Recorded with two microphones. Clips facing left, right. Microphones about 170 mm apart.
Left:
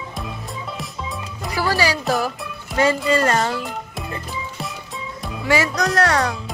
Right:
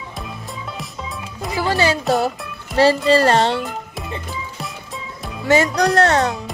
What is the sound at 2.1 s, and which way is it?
Speech, 30° right (ahead or behind).